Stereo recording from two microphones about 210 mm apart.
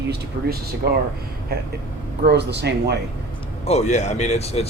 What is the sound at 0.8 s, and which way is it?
Speech, 45° right (ahead or behind).